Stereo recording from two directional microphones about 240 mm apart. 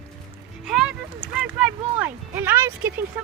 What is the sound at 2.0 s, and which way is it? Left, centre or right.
Music, centre.